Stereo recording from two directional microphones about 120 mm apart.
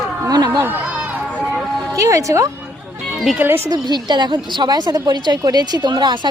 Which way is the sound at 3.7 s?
35° right (ahead or behind).